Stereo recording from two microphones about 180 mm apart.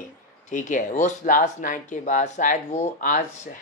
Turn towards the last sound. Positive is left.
turn(degrees=45)  # may be behind; listen again after turning